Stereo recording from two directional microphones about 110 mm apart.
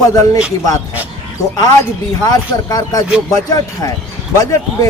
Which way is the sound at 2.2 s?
35° left (ahead or behind).